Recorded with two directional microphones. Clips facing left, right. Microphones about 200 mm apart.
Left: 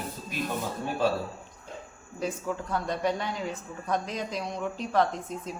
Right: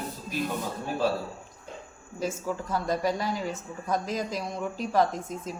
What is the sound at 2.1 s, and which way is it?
A woman's voice, 5° right (ahead or behind).